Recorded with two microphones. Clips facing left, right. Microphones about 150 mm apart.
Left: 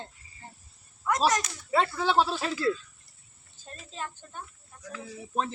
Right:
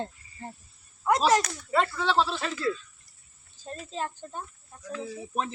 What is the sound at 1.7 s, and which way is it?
Speech, 10° left (ahead or behind).